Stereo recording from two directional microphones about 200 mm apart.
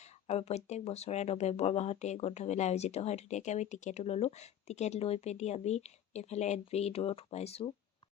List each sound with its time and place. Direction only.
0.0 s speech: 35° left (ahead or behind)